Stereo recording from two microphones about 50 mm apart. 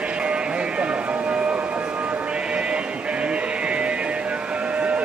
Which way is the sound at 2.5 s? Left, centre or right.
Right.